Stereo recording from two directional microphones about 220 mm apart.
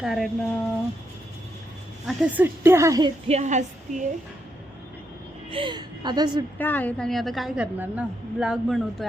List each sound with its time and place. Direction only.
0.0 s a woman's voice: centre (ahead or behind)
2.0 s a woman's voice: 5° right (ahead or behind)
3.2 s speech: 30° right (ahead or behind)
5.5 s a woman's voice: 25° right (ahead or behind)
6.6 s a woman's voice: 10° left (ahead or behind)